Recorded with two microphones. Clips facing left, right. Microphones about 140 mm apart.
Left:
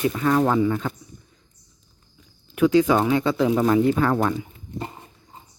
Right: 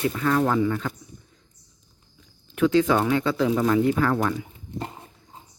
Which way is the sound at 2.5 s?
15° left (ahead or behind).